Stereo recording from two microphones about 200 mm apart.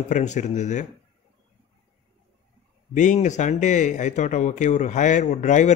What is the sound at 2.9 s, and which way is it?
Speech, 40° left (ahead or behind).